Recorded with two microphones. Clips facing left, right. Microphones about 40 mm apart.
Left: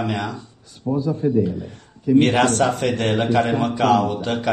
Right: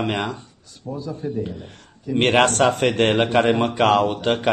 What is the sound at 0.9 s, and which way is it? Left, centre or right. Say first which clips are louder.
Speech: left 8 dB; centre.